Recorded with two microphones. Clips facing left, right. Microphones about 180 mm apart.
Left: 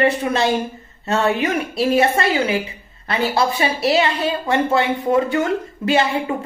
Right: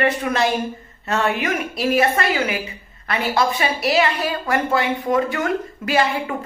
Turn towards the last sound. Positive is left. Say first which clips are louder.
# left 2 dB
turn(degrees=25)  # may be behind; listen again after turning